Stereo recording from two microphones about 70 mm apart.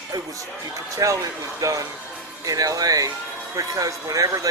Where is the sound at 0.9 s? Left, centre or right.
Right.